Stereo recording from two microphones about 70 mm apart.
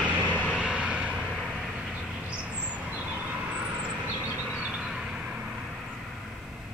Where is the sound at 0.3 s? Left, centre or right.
Left.